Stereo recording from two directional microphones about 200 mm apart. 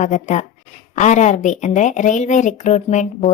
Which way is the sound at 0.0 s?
35° left (ahead or behind).